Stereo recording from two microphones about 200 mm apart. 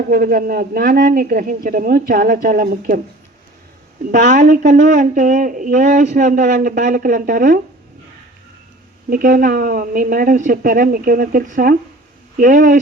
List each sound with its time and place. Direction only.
0.1 s a man's voice: 45° right (ahead or behind)
4.1 s speech: 40° right (ahead or behind)
9.0 s a man's voice: 45° right (ahead or behind)